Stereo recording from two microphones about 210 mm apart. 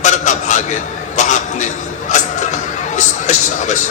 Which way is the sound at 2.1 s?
35° left (ahead or behind).